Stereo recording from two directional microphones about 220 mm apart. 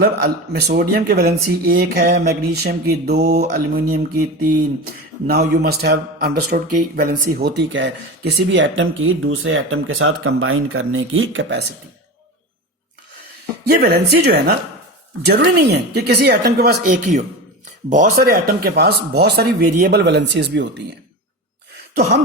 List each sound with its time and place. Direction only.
0.0 s speech: 45° right (ahead or behind)
13.7 s speech: 45° right (ahead or behind)